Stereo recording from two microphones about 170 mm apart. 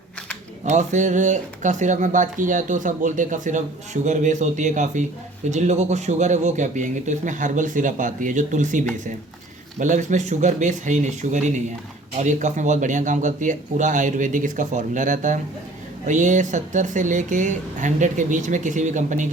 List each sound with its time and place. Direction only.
0.6 s speech: 45° right (ahead or behind)